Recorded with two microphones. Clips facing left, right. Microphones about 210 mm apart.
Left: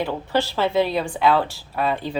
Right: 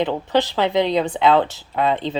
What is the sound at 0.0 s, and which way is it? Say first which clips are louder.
Speech: right 3 dB; 15° right (ahead or behind).